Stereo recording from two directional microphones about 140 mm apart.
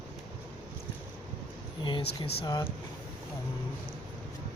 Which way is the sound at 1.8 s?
35° left (ahead or behind).